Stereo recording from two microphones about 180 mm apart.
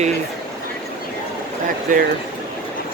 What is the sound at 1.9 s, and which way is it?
Speech, 45° right (ahead or behind).